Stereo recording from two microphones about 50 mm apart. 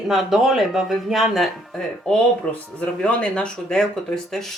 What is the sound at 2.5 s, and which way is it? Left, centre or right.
Speech, left.